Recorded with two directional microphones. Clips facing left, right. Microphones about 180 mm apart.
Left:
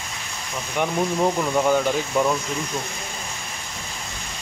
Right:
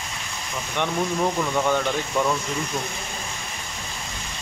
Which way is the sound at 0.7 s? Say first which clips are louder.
Left 2 dB; 10° left (ahead or behind).